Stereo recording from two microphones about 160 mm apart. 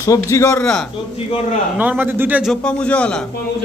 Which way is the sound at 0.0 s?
20° left (ahead or behind).